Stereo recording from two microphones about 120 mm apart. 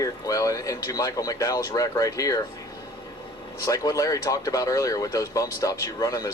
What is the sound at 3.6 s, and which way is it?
Speech, 30° left (ahead or behind).